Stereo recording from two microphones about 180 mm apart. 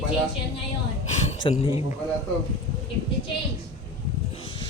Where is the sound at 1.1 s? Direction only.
40° left (ahead or behind).